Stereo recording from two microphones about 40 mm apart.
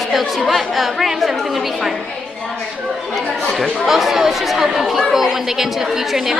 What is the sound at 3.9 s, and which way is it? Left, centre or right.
Speech, centre.